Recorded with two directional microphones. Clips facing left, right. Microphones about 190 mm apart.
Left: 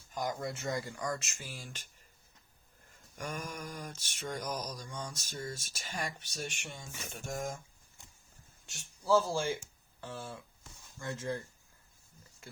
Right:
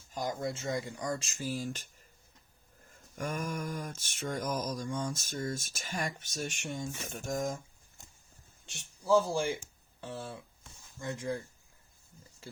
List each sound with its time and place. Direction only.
0.1 s speech: 25° right (ahead or behind); by 1.9 s 40° right (ahead or behind)
3.2 s mantra: 45° right (ahead or behind)
8.6 s speech: 20° right (ahead or behind)